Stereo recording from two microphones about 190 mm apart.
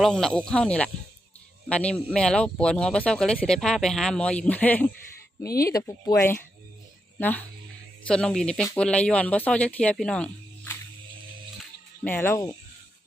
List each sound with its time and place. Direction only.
0.0 s speech: 5° left (ahead or behind)
12.0 s speech: 10° left (ahead or behind)